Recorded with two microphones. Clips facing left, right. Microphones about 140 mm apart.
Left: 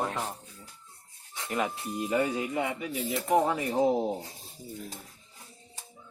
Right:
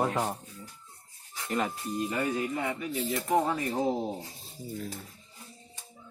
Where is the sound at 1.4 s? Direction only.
Centre (ahead or behind).